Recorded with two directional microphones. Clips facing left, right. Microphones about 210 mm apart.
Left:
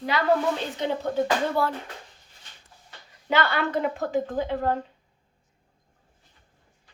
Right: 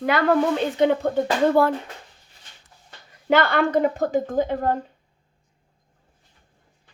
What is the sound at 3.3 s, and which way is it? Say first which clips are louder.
A woman's voice: right 6 dB; 50° right (ahead or behind).